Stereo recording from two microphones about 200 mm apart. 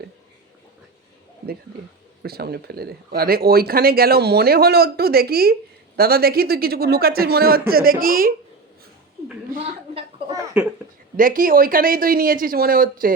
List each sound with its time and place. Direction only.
2.2 s speech: 50° right (ahead or behind)
9.5 s speech: 45° right (ahead or behind)
10.3 s speech: 5° right (ahead or behind)
11.2 s speech: 45° right (ahead or behind)